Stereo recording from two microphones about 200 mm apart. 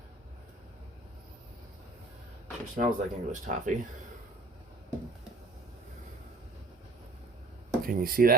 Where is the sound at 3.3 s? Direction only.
40° right (ahead or behind).